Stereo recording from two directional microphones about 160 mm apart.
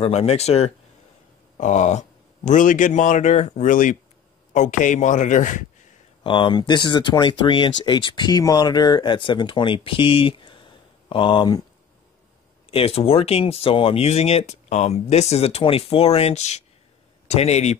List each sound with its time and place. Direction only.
0.0 s speech: 40° left (ahead or behind)
6.2 s speech: 30° left (ahead or behind)
12.7 s speech: 40° left (ahead or behind)